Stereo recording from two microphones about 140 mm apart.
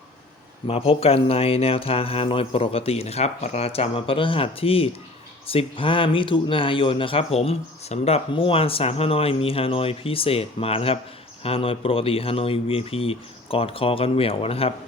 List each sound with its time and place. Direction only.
0.7 s speech: 45° left (ahead or behind)